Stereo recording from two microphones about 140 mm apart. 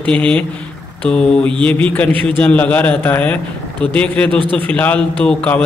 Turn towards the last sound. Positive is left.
turn(degrees=10)  # may be behind; listen again after turning